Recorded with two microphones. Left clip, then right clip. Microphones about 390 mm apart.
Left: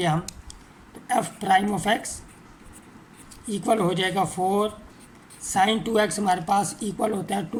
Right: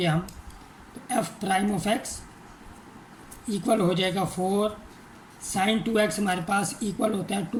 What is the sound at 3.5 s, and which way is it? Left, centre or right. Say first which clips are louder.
Speech: left 1 dB; centre.